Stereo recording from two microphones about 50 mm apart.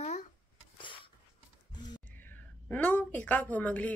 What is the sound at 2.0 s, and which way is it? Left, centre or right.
A woman's voice, left.